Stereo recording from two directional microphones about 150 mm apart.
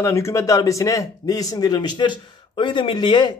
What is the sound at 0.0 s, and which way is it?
Speech, 20° left (ahead or behind).